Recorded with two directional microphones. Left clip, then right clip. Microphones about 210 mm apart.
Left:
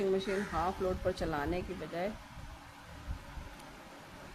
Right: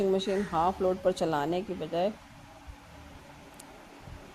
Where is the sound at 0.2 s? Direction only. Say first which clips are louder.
Right 6 dB; 25° right (ahead or behind).